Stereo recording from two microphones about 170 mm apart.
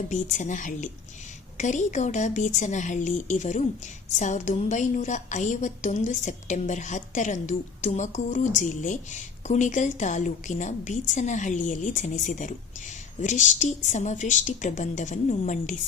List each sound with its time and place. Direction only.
0.1 s a woman's voice: 45° left (ahead or behind)